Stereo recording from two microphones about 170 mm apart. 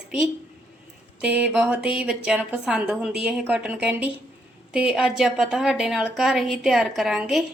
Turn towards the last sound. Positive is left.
turn(degrees=-5)  # may be behind; listen again after turning